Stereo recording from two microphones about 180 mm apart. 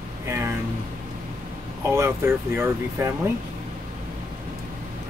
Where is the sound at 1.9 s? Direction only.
15° right (ahead or behind).